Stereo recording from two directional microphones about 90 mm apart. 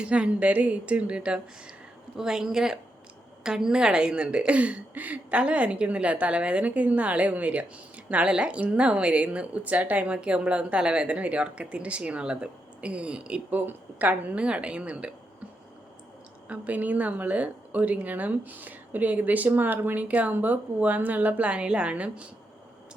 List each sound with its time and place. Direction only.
0.0 s a woman's voice: 15° right (ahead or behind)
16.5 s a woman's voice: 15° right (ahead or behind)